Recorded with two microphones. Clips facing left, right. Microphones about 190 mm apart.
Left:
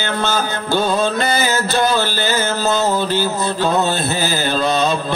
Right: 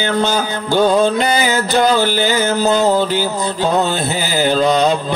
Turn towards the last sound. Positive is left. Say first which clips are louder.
# right 3 dB
turn(degrees=-15)  # may be behind; listen again after turning